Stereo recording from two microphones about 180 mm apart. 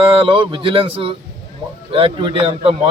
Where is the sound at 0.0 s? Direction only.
30° right (ahead or behind).